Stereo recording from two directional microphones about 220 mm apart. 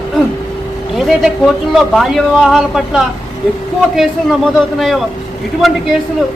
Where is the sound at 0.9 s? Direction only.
Centre (ahead or behind).